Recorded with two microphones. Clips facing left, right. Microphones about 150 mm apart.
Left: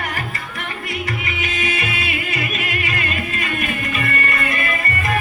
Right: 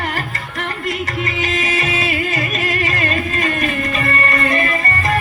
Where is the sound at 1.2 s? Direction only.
40° right (ahead or behind).